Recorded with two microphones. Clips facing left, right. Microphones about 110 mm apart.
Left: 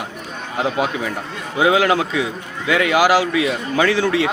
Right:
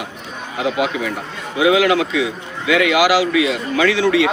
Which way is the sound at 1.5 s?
35° left (ahead or behind).